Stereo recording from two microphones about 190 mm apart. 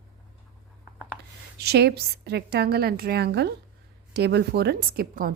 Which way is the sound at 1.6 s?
60° right (ahead or behind).